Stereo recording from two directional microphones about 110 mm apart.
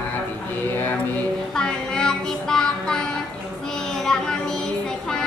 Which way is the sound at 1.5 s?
5° left (ahead or behind).